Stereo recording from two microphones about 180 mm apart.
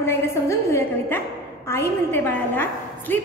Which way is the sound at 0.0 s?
15° left (ahead or behind).